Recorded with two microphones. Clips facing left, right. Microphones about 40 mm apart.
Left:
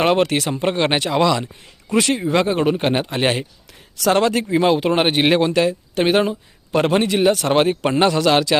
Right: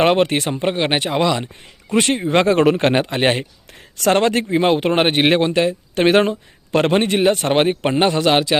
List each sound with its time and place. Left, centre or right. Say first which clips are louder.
0.0 s a man's voice: right 1 dB; right
0.5 s speech: even; centre
1.9 s a man's voice: right 1 dB; right
2.5 s a man's voice: right 4 dB; right
3.2 s a man's voice: right 2 dB; right
4.4 s a man's voice: even; right
5.9 s a man's voice: right 6 dB; right